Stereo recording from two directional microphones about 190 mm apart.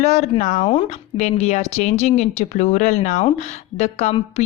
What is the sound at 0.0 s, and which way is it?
A woman's voice, 35° left (ahead or behind).